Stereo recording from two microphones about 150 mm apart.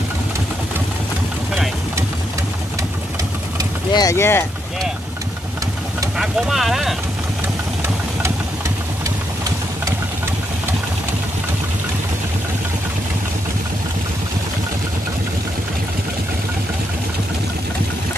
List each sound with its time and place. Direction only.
3.9 s speech: 20° left (ahead or behind)
6.1 s speech: 5° right (ahead or behind)